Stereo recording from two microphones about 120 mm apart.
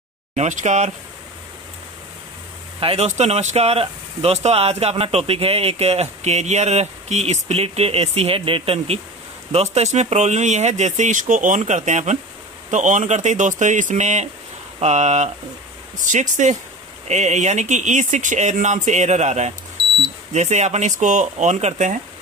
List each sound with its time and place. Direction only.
0.4 s speech: 80° right
2.8 s speech: 50° right (ahead or behind)
3.1 s speech: 70° right (ahead or behind)
12.7 s speech: 90° right; by 15.3 s 70° right (ahead or behind)
16.0 s speech: 90° right
17.1 s speech: 75° right (ahead or behind)